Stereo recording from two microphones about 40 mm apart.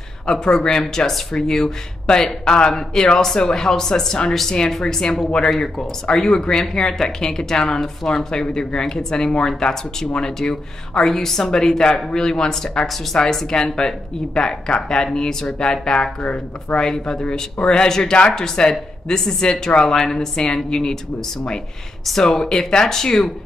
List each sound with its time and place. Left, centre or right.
0.3 s speech: centre
12.8 s speech: centre
13.2 s speech: centre
22.2 s speech: centre